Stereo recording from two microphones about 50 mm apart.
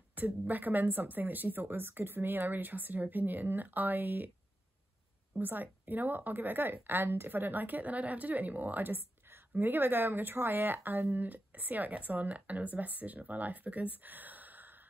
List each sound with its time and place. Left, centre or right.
0.1 s speech: right
5.4 s speech: right